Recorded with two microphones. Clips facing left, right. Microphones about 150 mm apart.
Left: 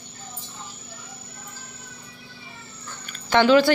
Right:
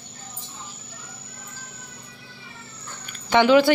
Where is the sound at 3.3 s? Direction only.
15° right (ahead or behind).